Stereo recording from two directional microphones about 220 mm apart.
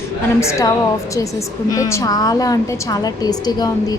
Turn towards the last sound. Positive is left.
turn(degrees=15)  # may be behind; listen again after turning